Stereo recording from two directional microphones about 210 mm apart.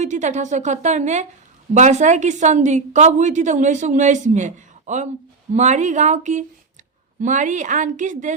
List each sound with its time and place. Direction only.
0.0 s a woman's voice: 35° right (ahead or behind)